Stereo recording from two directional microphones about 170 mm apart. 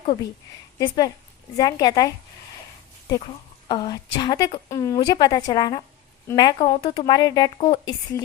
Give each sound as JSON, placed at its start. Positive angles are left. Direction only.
{"t": 0.8, "sound": "speech", "side_deg": 25}
{"t": 3.7, "sound": "speech", "side_deg": 25}